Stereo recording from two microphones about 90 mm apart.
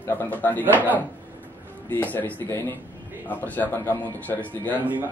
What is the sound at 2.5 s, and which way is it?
Speech, 30° left (ahead or behind).